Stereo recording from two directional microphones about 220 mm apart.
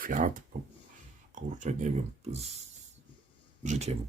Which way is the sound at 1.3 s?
35° right (ahead or behind).